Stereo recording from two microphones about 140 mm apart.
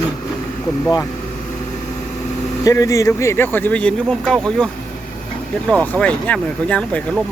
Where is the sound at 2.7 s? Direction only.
25° left (ahead or behind).